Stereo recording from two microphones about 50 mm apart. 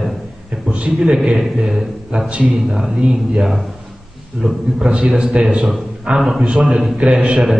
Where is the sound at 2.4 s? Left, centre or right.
Centre.